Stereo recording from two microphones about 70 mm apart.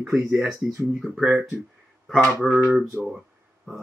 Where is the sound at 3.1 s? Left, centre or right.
Centre.